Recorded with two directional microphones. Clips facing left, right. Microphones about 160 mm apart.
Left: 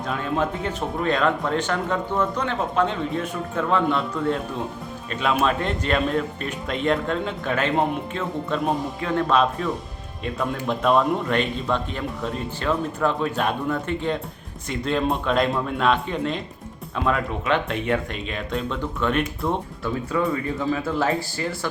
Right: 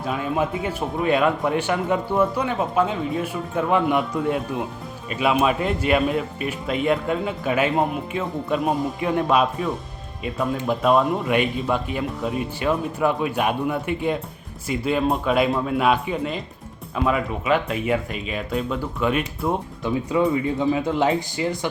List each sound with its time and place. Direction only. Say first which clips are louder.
0.0 s speech: right 1 dB; 5° right (ahead or behind)
19.8 s speech: right 5 dB; 15° right (ahead or behind)